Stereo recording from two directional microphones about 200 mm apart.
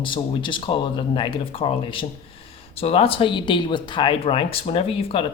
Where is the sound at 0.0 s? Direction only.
25° left (ahead or behind).